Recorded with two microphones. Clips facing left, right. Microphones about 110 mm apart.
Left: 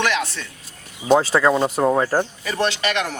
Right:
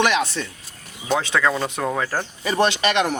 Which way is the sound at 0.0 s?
20° right (ahead or behind).